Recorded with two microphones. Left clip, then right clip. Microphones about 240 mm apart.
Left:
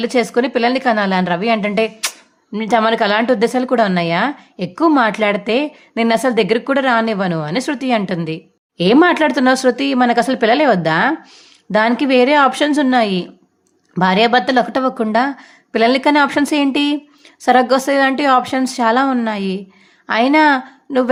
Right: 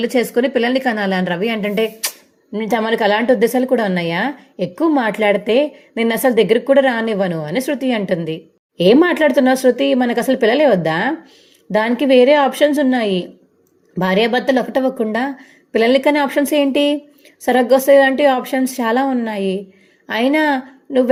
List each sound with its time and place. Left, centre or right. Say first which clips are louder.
0.0 s a woman's voice: even; centre